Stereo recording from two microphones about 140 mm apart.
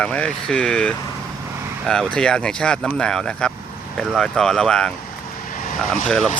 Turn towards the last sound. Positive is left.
turn(degrees=5)  # may be behind; listen again after turning